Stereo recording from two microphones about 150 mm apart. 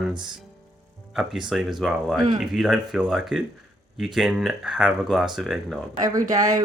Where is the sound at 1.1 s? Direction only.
Centre (ahead or behind).